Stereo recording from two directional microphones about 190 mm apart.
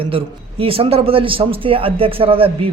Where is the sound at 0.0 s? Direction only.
30° right (ahead or behind).